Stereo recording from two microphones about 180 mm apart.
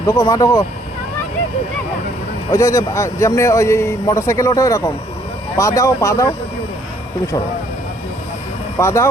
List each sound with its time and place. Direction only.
0.0 s speech: 20° left (ahead or behind)
2.5 s speech: 20° left (ahead or behind)
8.8 s speech: 15° left (ahead or behind)